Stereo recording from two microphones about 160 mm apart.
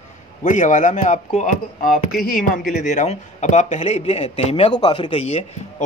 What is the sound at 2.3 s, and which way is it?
A man's voice, 60° left (ahead or behind).